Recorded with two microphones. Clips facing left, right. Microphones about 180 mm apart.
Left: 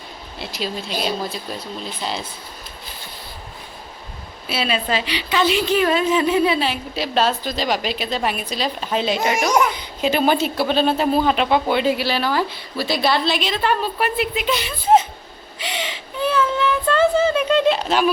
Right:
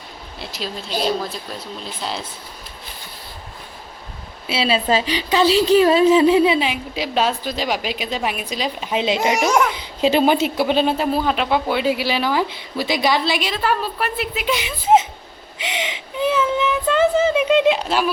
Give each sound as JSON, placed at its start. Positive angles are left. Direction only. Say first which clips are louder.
{"t": 0.3, "sound": "speech", "louder": "left 2 dB", "side_deg": 0}
{"t": 4.4, "sound": "a woman's voice", "louder": "right 3 dB", "side_deg": -25}
{"t": 10.9, "sound": "speech", "louder": "left 2 dB", "side_deg": 0}